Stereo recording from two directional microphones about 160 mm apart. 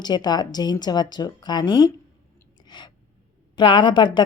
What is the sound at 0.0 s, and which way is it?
Speech, 25° left (ahead or behind).